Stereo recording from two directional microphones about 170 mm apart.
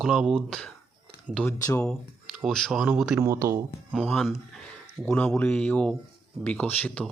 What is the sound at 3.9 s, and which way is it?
Speech, 5° left (ahead or behind).